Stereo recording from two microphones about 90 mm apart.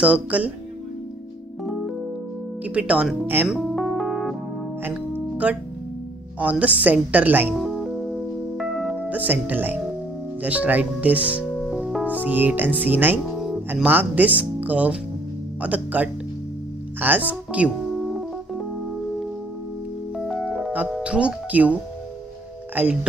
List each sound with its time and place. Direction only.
0.0 s a woman's voice: 15° right (ahead or behind)
1.6 s music: centre (ahead or behind)
2.6 s speech: 15° right (ahead or behind)
3.5 s music: centre (ahead or behind)
5.4 s a woman's voice: 15° right (ahead or behind)
7.5 s music: centre (ahead or behind)
9.1 s a woman's voice: 20° right (ahead or behind)
20.2 s music: 5° right (ahead or behind)
20.9 s a woman's voice: 10° right (ahead or behind)
22.8 s a woman's voice: 15° right (ahead or behind)